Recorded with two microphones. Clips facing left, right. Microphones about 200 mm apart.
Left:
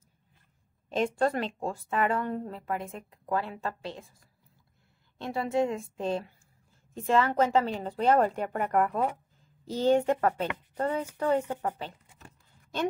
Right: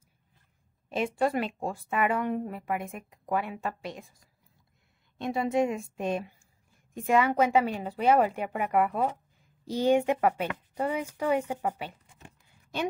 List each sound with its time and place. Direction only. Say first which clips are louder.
0.8 s speech: left 1 dB; 10° right (ahead or behind)
5.2 s speech: right 1 dB; 15° right (ahead or behind)